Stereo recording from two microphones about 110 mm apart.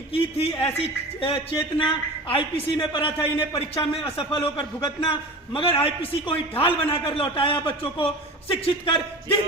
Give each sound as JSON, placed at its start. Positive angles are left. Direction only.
{"t": 0.1, "sound": "a man's voice", "side_deg": 60}